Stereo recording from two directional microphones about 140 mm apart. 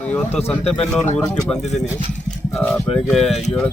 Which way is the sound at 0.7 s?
5° left (ahead or behind).